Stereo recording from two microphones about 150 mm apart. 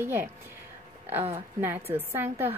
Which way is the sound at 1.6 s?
15° right (ahead or behind).